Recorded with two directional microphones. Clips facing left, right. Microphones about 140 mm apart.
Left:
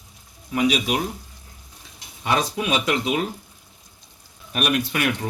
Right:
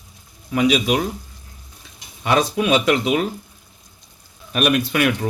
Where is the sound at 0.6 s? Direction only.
90° right.